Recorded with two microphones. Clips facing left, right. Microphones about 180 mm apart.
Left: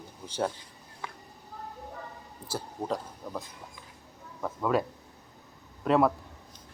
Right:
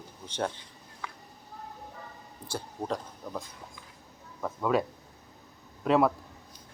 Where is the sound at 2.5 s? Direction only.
5° left (ahead or behind).